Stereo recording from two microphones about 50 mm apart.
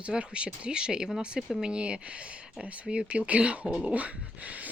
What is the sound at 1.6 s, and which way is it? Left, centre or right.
Speech, centre.